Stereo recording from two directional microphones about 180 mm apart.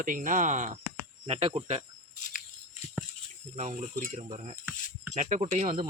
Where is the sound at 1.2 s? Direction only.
35° right (ahead or behind).